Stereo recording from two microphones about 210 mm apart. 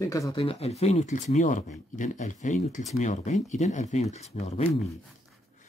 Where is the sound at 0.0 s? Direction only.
15° left (ahead or behind); by 4.6 s 30° left (ahead or behind).